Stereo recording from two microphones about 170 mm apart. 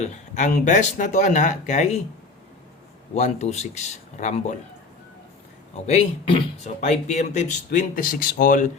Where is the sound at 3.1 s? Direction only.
40° left (ahead or behind).